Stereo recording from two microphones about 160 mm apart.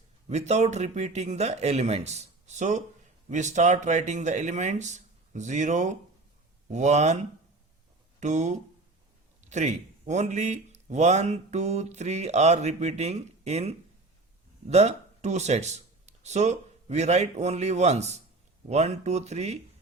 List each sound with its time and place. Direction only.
0.3 s speech: 45° right (ahead or behind)
8.2 s speech: 50° right (ahead or behind)